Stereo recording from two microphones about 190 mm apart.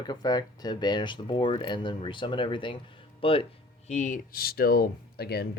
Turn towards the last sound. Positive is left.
turn(degrees=55)  # may be behind; listen again after turning